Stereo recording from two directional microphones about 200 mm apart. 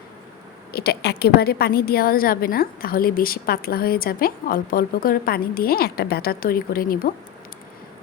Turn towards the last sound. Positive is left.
turn(degrees=45)  # may be behind; listen again after turning